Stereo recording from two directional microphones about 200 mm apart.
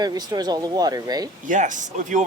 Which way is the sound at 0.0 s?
20° right (ahead or behind).